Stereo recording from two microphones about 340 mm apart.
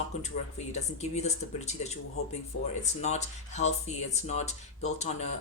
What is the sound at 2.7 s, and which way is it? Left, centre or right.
Speech, centre.